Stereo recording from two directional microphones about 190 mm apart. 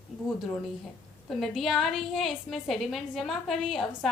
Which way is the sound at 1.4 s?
Centre (ahead or behind).